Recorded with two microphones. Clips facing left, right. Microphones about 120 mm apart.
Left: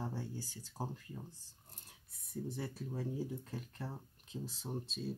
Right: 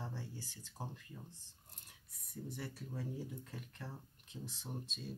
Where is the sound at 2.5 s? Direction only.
25° left (ahead or behind).